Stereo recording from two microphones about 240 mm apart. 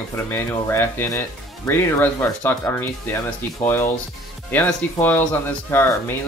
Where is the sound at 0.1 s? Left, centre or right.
Centre.